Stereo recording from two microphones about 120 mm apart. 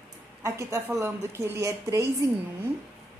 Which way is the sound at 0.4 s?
25° right (ahead or behind).